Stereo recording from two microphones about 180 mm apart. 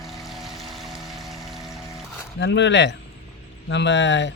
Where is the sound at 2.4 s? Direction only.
80° left.